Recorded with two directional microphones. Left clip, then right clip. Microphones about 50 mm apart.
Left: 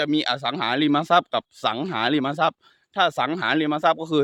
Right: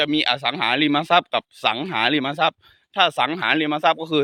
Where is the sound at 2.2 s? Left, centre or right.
Left.